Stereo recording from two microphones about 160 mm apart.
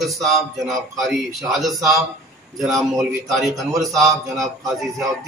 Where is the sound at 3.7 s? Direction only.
20° right (ahead or behind).